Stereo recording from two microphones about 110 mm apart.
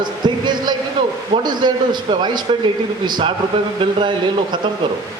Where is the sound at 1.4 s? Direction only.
40° right (ahead or behind).